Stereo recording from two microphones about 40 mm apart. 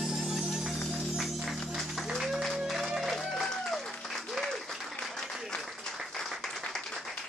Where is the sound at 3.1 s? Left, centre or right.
Centre.